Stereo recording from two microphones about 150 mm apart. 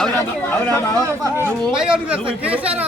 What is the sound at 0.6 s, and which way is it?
Speech, 15° left (ahead or behind).